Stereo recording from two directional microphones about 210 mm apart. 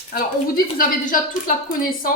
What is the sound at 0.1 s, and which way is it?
A woman's voice, 45° left (ahead or behind).